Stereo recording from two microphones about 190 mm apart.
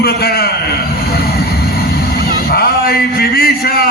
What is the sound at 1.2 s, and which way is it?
Vehicle, 55° left (ahead or behind).